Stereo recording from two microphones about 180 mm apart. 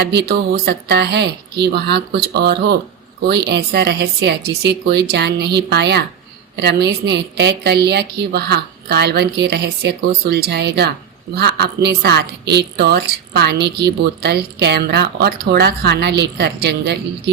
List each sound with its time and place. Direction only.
0.0 s a woman's voice: 65° right (ahead or behind)